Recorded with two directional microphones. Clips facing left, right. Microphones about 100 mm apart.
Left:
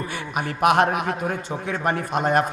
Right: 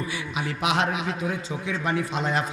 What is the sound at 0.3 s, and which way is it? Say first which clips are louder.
A man's voice: left 7 dB; 55° left (ahead or behind).